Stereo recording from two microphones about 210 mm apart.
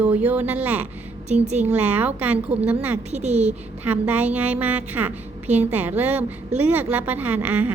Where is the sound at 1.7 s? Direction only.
5° right (ahead or behind).